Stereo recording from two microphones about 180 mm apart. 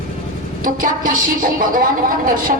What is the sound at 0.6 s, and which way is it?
Speech, 50° right (ahead or behind).